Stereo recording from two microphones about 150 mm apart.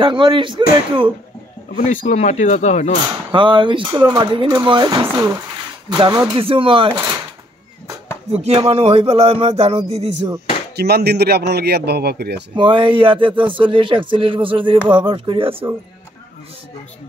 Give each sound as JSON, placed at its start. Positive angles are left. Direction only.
{"t": 0.0, "sound": "speech", "side_deg": -35}
{"t": 2.0, "sound": "speech", "side_deg": 50}
{"t": 3.3, "sound": "speech", "side_deg": -35}
{"t": 8.3, "sound": "speech", "side_deg": -45}
{"t": 9.8, "sound": "speech", "side_deg": -20}
{"t": 10.8, "sound": "a man's voice", "side_deg": -90}
{"t": 12.5, "sound": "speech", "side_deg": -35}